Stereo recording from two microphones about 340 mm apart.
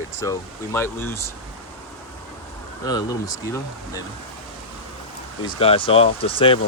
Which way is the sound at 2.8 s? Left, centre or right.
Centre.